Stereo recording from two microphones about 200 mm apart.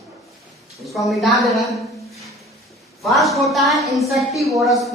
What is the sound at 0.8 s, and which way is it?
A woman's voice, centre (ahead or behind).